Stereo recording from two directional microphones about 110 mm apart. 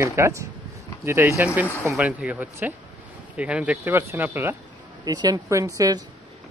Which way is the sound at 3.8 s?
20° right (ahead or behind).